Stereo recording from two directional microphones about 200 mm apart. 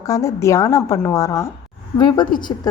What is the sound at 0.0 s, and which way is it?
A woman's voice, 15° left (ahead or behind).